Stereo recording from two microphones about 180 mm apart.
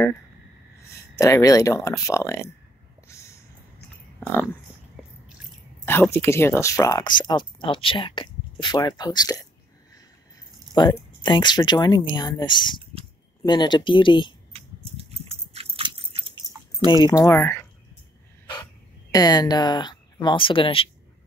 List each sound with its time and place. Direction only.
0.9 s speech: 15° left (ahead or behind)
3.1 s a sound: 15° left (ahead or behind)
4.2 s speech: 10° left (ahead or behind)
5.9 s speech: 15° left (ahead or behind)
10.7 s speech: 15° left (ahead or behind)
14.5 s biting: 35° right (ahead or behind)
16.4 s a sound: 20° right (ahead or behind)
17.0 s speech: 20° left (ahead or behind)
19.1 s speech: 20° left (ahead or behind)